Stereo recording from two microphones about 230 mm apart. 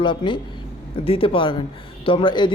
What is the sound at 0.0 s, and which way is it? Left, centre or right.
A man's voice, left.